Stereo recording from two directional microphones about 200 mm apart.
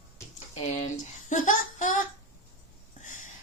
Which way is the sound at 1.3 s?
40° left (ahead or behind).